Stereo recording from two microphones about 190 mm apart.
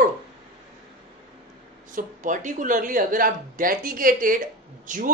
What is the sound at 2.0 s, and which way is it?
A man's voice, 45° right (ahead or behind).